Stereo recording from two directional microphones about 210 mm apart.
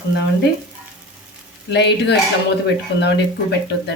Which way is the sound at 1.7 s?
55° left (ahead or behind).